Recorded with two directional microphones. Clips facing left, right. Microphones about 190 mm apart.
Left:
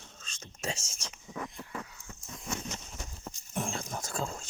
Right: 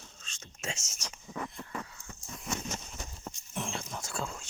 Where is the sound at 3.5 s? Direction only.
45° left (ahead or behind).